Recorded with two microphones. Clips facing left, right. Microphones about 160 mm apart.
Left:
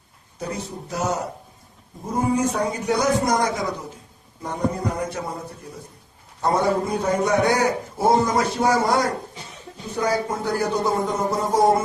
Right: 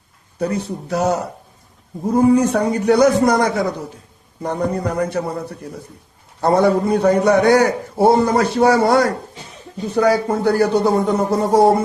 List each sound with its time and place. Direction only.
0.3 s a man's voice: 65° right (ahead or behind)